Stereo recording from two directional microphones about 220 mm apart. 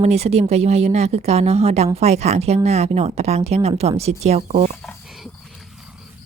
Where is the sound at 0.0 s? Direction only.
30° right (ahead or behind).